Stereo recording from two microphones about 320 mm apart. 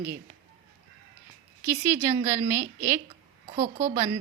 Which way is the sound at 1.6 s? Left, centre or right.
Centre.